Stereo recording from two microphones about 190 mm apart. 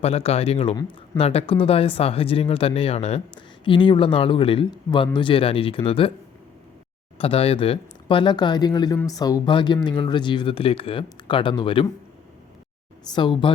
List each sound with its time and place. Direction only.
0.0 s speech: 30° left (ahead or behind)
7.2 s speech: 30° left (ahead or behind)
13.1 s speech: 25° left (ahead or behind)